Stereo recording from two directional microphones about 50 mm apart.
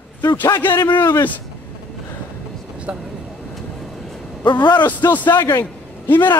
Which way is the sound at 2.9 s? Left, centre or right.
Right.